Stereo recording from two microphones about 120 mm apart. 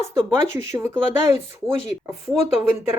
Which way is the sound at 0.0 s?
25° right (ahead or behind).